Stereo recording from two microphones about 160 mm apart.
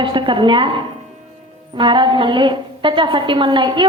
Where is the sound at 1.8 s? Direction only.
30° right (ahead or behind).